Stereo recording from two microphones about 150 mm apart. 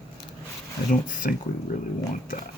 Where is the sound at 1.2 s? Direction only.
65° left (ahead or behind).